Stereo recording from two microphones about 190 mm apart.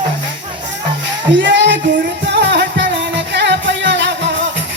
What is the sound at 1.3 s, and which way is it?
Music, 70° right (ahead or behind).